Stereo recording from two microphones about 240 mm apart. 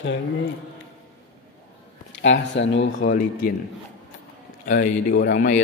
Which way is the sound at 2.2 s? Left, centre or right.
Left.